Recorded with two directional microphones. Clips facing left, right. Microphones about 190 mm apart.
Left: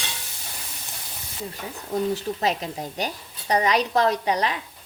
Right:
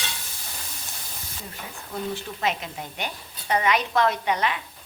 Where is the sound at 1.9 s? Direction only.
40° left (ahead or behind).